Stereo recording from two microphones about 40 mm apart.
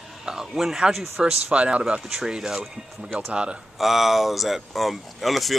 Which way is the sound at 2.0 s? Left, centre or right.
Centre.